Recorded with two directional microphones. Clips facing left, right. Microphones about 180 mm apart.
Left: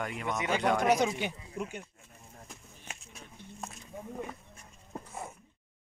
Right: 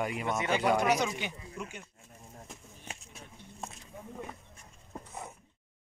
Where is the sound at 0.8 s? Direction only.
50° left (ahead or behind).